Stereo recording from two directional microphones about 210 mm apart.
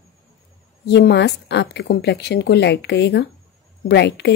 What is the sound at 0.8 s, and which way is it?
A woman's voice, 55° left (ahead or behind).